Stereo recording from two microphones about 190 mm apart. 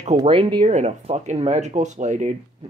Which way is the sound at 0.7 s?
35° right (ahead or behind).